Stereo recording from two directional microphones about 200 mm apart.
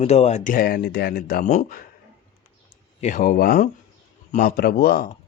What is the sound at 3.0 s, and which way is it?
Speech, 40° left (ahead or behind).